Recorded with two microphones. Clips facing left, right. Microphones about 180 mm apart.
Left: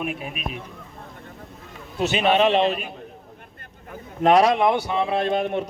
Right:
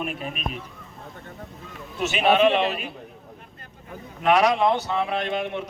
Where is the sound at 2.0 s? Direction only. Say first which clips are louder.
Left 4 dB; 35° left (ahead or behind).